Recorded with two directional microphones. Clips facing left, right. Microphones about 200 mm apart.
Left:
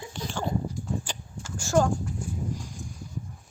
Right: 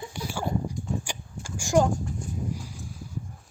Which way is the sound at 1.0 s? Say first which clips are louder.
Right 1 dB; 10° right (ahead or behind).